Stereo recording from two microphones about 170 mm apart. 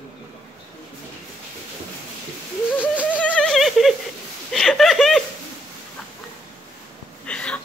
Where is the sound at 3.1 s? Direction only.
10° left (ahead or behind).